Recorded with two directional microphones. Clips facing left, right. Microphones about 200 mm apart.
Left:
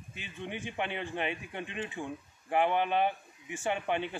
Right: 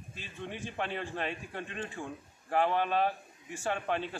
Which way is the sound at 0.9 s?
15° left (ahead or behind).